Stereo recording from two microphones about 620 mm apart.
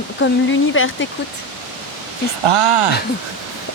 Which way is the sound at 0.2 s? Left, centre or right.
Centre.